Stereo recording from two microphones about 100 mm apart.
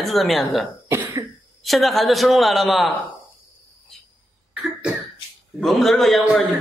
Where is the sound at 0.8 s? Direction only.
25° right (ahead or behind).